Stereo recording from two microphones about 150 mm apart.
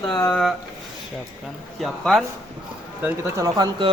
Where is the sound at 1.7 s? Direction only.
Centre (ahead or behind).